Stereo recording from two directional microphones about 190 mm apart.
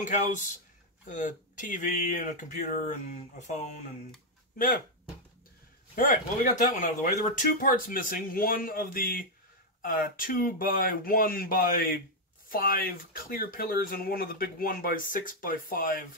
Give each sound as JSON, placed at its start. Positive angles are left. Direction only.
{"t": 1.1, "sound": "speech", "side_deg": 40}
{"t": 5.9, "sound": "speech", "side_deg": 45}